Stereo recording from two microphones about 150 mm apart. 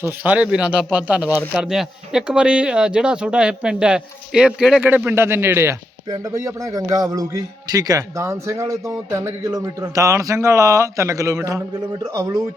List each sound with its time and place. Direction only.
0.0 s a man's voice: 10° right (ahead or behind)